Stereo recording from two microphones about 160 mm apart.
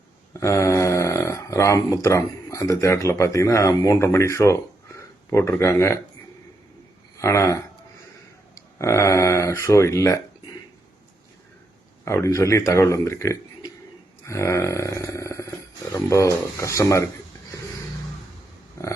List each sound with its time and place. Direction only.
0.3 s speech: 20° left (ahead or behind)
7.2 s speech: 20° left (ahead or behind)
12.0 s speech: 20° left (ahead or behind)
14.3 s a sound: 20° left (ahead or behind)